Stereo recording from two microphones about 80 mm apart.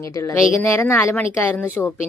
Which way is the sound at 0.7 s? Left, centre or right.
Left.